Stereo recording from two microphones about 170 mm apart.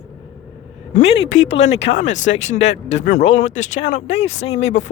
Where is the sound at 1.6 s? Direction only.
90° left.